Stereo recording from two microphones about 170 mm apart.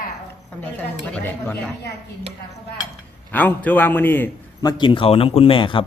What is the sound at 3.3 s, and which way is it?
A man's voice, 10° left (ahead or behind).